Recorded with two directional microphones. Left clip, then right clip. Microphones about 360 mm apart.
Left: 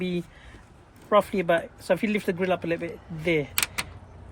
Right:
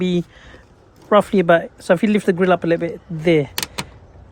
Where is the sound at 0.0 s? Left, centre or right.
Right.